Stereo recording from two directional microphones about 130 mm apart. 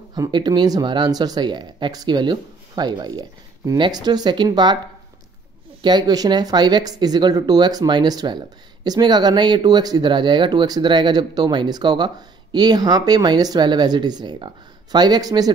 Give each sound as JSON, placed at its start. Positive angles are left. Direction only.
{"t": 0.1, "sound": "speech", "side_deg": -35}
{"t": 5.8, "sound": "speech", "side_deg": -35}